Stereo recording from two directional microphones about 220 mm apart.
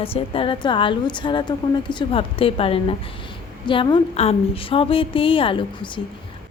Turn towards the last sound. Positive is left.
turn(degrees=25)  # may be behind; listen again after turning